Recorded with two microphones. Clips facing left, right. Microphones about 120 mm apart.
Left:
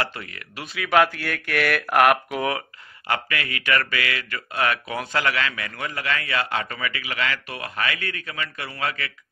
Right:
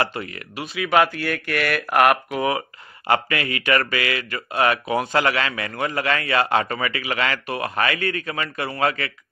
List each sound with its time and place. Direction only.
0.0 s speech: 25° right (ahead or behind)
0.6 s speech: 5° right (ahead or behind)
3.1 s speech: 30° right (ahead or behind)